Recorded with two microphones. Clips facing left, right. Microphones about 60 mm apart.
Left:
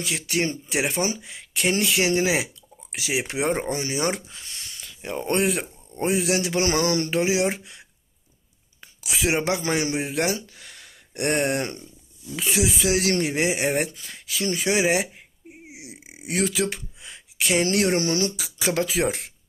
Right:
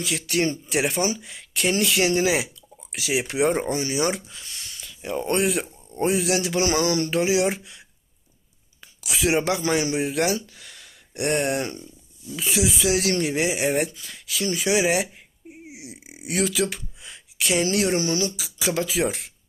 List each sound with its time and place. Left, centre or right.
0.0 s speech: left
7.1 s speech: left
9.0 s speech: left
14.0 s speech: left
15.6 s a sound: left
17.3 s speech: left